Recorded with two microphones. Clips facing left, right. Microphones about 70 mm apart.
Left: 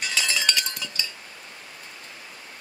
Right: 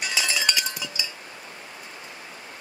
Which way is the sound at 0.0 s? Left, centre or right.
Centre.